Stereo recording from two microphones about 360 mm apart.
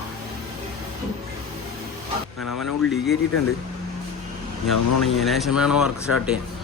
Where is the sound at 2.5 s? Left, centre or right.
Left.